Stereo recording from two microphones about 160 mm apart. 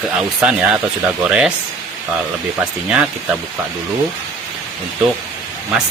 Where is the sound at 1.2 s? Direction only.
5° right (ahead or behind).